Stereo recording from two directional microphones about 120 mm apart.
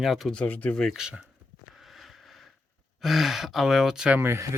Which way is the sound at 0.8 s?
5° right (ahead or behind).